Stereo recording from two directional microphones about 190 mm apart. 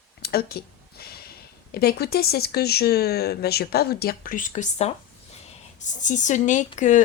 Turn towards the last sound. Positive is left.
turn(degrees=40)  # may be behind; listen again after turning